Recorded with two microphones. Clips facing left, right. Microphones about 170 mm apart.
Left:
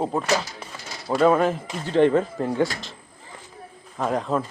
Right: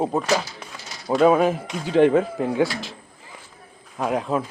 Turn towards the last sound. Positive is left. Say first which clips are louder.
# right 1 dB
turn(degrees=-5)  # may be behind; listen again after turning